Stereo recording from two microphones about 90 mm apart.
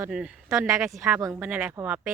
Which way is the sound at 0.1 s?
10° right (ahead or behind).